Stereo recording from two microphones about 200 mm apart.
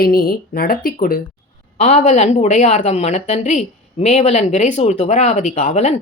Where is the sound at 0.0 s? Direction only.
50° left (ahead or behind).